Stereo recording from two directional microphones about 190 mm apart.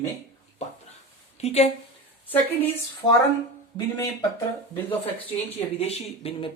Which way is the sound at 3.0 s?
25° left (ahead or behind).